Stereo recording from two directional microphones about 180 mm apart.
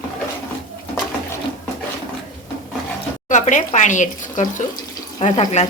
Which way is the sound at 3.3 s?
45° left (ahead or behind).